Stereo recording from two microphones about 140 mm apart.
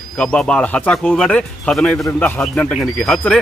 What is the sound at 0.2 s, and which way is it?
Speech, 5° left (ahead or behind).